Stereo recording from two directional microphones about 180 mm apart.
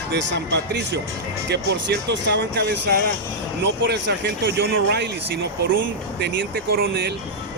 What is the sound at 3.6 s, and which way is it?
Speech, 80° right.